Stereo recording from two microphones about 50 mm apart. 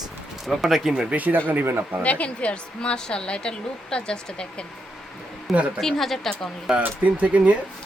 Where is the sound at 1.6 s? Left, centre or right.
Right.